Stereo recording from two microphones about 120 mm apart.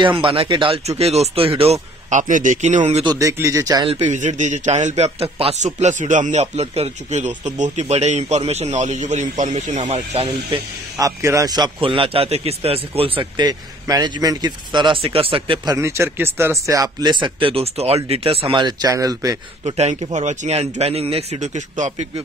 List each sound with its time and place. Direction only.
0.0 s a man's voice: 45° right (ahead or behind)
0.8 s speech: 60° right (ahead or behind)
2.0 s a man's voice: 90° right
3.2 s speech: 25° right (ahead or behind)
3.8 s a man's voice: 45° right (ahead or behind)
4.1 s a man's voice: 85° right; by 5.6 s 55° right (ahead or behind)
5.6 s a man's voice: 85° right; by 10.2 s 70° right (ahead or behind)
11.0 s a man's voice: 25° right (ahead or behind); by 15.7 s 45° right (ahead or behind)
15.7 s a man's voice: 25° right (ahead or behind); by 18.6 s 55° right (ahead or behind)
18.6 s speech: 35° right (ahead or behind)
19.6 s speech: 65° right (ahead or behind)
20.8 s a man's voice: 55° right (ahead or behind); by 22.0 s 85° right